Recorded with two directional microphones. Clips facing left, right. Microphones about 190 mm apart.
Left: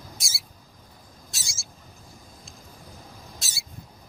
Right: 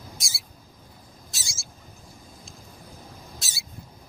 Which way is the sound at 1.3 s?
Centre (ahead or behind).